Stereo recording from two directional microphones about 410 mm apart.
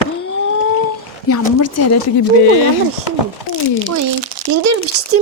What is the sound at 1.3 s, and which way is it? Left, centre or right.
Speech, left.